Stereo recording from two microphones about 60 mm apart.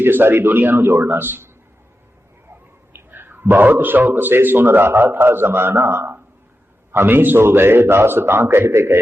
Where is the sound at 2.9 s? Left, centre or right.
Right.